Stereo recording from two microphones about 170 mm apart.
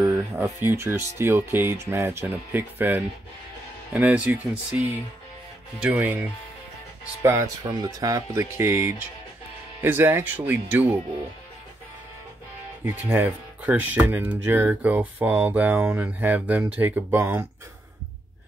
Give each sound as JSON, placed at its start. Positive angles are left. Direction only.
{"t": 0.0, "sound": "speech", "side_deg": -15}
{"t": 5.9, "sound": "speech", "side_deg": -10}
{"t": 12.8, "sound": "speech", "side_deg": -10}